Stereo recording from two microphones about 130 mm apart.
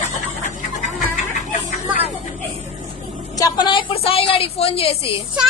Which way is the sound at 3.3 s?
30° left (ahead or behind).